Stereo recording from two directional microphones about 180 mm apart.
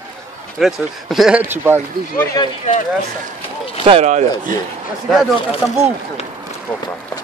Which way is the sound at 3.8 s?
35° right (ahead or behind).